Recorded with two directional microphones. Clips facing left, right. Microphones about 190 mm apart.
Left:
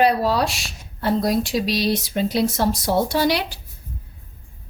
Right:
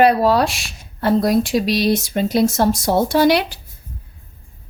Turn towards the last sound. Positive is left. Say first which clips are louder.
# right 5 dB
turn(degrees=-55)  # may be behind; listen again after turning